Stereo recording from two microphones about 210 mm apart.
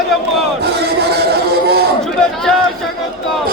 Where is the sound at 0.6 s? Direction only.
50° right (ahead or behind).